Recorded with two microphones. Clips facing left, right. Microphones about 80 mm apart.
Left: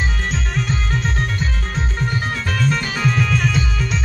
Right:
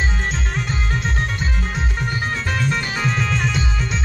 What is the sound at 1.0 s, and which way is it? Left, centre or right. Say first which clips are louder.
Music: left 1 dB; centre.